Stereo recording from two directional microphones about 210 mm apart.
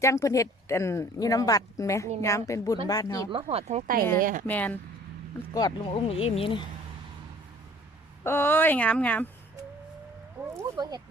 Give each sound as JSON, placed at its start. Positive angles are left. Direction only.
{"t": 0.0, "sound": "speech", "side_deg": 15}
{"t": 3.3, "sound": "speech", "side_deg": -30}
{"t": 4.4, "sound": "speech", "side_deg": 10}
{"t": 5.5, "sound": "speech", "side_deg": 20}
{"t": 8.2, "sound": "speech", "side_deg": 10}
{"t": 10.6, "sound": "speech", "side_deg": -20}